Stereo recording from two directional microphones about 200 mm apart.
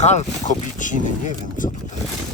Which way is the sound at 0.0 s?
35° left (ahead or behind).